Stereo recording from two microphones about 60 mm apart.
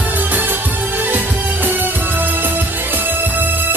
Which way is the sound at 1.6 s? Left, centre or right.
Right.